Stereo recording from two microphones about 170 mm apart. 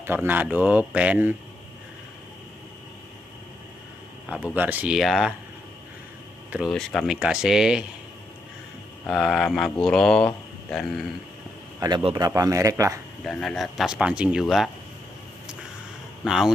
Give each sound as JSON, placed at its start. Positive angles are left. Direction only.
{"t": 0.0, "sound": "speech", "side_deg": -15}
{"t": 4.3, "sound": "speech", "side_deg": -5}
{"t": 6.5, "sound": "speech", "side_deg": 0}
{"t": 9.0, "sound": "speech", "side_deg": 0}
{"t": 12.0, "sound": "a man's voice", "side_deg": -30}
{"t": 12.3, "sound": "speech", "side_deg": -20}
{"t": 13.2, "sound": "speech", "side_deg": 0}
{"t": 16.3, "sound": "speech", "side_deg": 0}